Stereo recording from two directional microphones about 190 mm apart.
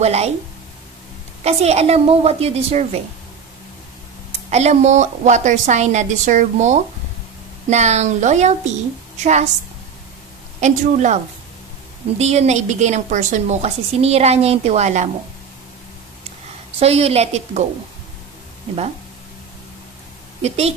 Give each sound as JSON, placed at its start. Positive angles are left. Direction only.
{"t": 0.0, "sound": "a woman's voice", "side_deg": -35}
{"t": 1.4, "sound": "a woman's voice", "side_deg": -35}
{"t": 4.3, "sound": "a woman's voice", "side_deg": -35}
{"t": 10.6, "sound": "a woman's voice", "side_deg": -40}
{"t": 12.2, "sound": "a woman's voice", "side_deg": -35}
{"t": 16.8, "sound": "a woman's voice", "side_deg": -30}
{"t": 20.4, "sound": "a woman's voice", "side_deg": -35}